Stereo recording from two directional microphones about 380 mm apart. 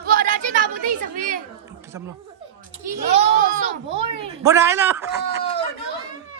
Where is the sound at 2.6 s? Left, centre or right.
Centre.